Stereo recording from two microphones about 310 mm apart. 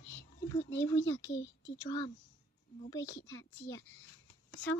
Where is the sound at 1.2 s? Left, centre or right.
Left.